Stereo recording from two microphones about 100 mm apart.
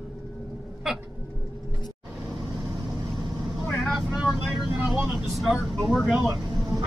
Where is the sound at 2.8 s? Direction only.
Centre (ahead or behind).